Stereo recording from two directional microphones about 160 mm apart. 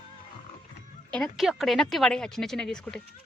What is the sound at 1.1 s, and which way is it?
Speech, centre (ahead or behind).